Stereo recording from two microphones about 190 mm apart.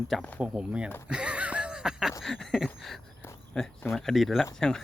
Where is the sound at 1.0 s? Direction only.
5° right (ahead or behind).